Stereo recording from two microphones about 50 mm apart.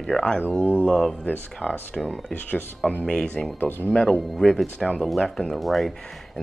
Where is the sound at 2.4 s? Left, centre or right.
Left.